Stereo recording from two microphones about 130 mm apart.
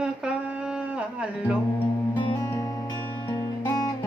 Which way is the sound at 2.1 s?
40° left (ahead or behind).